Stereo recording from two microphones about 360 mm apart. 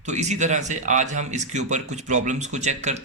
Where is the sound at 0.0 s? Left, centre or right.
Centre.